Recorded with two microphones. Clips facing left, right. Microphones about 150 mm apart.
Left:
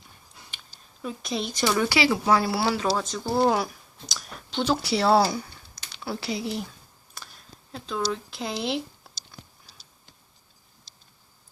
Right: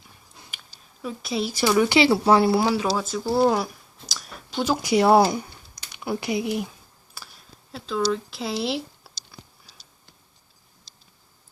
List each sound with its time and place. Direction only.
1.0 s speech: 5° right (ahead or behind)
2.0 s speech: 35° right (ahead or behind); by 6.7 s 15° right (ahead or behind)
7.2 s a sound: 5° right (ahead or behind)
7.7 s speech: 5° right (ahead or behind)